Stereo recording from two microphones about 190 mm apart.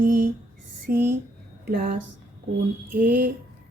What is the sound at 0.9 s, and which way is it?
Speech, 50° right (ahead or behind).